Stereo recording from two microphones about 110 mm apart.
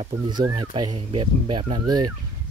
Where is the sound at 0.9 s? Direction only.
60° right (ahead or behind).